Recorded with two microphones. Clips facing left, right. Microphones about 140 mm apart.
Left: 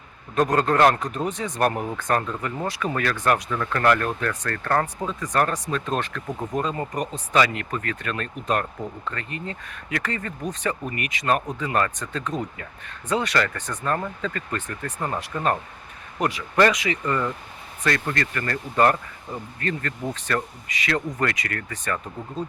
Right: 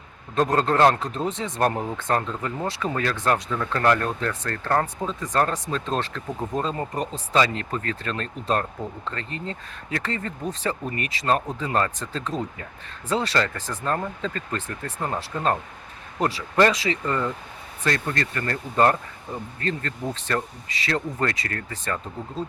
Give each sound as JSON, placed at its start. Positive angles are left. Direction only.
{"t": 0.3, "sound": "speech", "side_deg": -25}
{"t": 16.2, "sound": "speech", "side_deg": -30}